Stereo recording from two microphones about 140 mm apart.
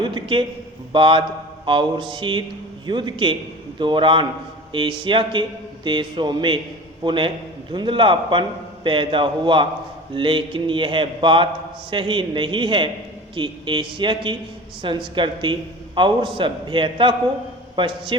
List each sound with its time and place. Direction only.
0.0 s a man's voice: 35° right (ahead or behind)